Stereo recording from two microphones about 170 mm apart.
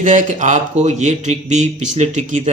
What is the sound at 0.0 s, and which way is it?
Speech, 45° right (ahead or behind).